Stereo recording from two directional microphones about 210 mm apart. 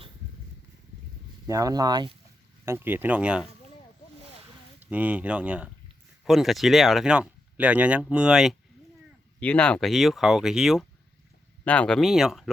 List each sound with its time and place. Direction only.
1.5 s speech: 15° right (ahead or behind)
4.8 s speech: 5° right (ahead or behind)